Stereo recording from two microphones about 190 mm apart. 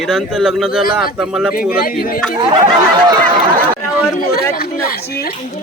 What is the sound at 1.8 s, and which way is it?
Speech, 50° left (ahead or behind).